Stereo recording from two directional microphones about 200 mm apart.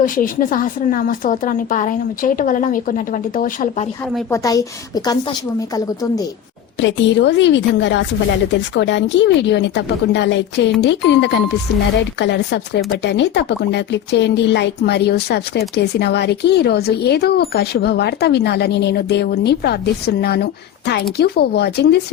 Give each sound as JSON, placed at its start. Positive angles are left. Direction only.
{"t": 0.0, "sound": "speech", "side_deg": 45}
{"t": 4.3, "sound": "a woman's voice", "side_deg": 15}
{"t": 6.7, "sound": "speech", "side_deg": 65}